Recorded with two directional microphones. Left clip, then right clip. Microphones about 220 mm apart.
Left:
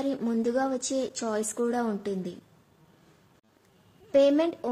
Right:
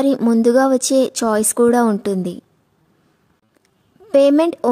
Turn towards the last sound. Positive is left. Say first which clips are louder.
# right 10 dB
turn(degrees=-50)  # may be behind; listen again after turning